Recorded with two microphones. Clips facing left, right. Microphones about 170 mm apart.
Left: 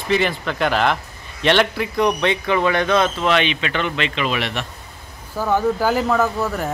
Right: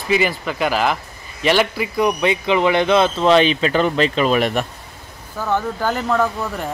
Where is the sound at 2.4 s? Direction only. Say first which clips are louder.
Right 4 dB; 20° right (ahead or behind); by 4.7 s 45° right (ahead or behind).